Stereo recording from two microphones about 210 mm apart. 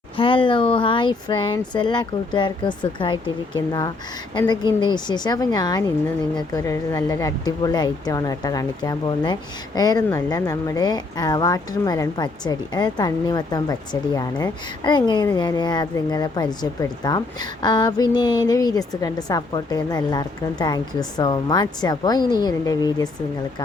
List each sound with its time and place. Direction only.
0.2 s speech: 25° left (ahead or behind)
4.9 s speech: 20° left (ahead or behind)